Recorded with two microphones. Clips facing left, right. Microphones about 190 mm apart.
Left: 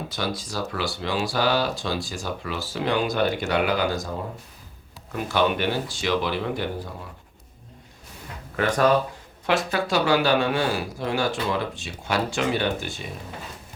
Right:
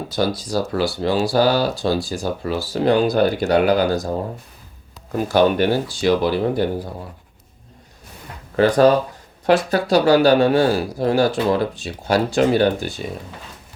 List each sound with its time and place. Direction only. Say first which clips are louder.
0.1 s speech: right 12 dB; 35° right (ahead or behind)
5.1 s speech: right 7 dB; 40° right (ahead or behind)
8.5 s speech: right 7 dB; 35° right (ahead or behind)